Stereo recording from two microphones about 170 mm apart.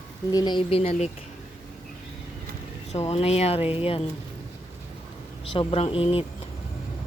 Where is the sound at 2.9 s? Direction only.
40° left (ahead or behind).